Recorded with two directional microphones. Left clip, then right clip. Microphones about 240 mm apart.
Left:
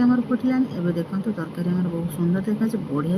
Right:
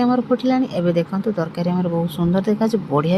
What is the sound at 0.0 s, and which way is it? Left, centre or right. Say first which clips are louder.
Speech: right 4 dB; right.